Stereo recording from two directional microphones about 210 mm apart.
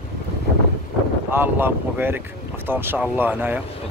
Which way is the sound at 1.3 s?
10° right (ahead or behind).